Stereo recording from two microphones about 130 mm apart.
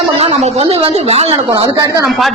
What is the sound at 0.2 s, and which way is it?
A woman's voice, 50° right (ahead or behind).